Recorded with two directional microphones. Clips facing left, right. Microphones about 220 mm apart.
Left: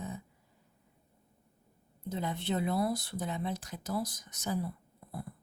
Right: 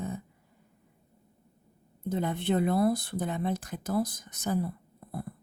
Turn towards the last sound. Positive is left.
turn(degrees=-55)  # may be behind; listen again after turning